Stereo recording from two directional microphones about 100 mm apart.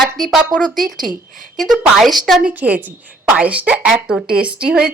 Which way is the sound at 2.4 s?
15° right (ahead or behind).